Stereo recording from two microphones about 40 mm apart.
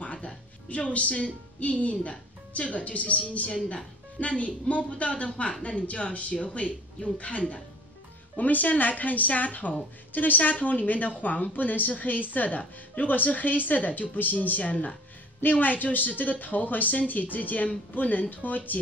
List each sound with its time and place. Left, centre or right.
0.0 s music: left
0.7 s speech: left